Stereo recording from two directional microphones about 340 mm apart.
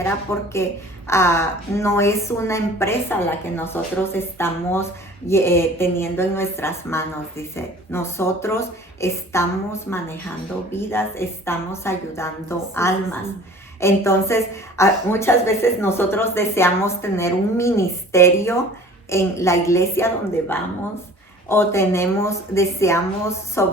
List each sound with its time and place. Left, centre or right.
0.0 s a woman's voice: centre